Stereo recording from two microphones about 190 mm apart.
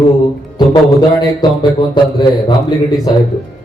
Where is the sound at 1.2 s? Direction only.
20° left (ahead or behind).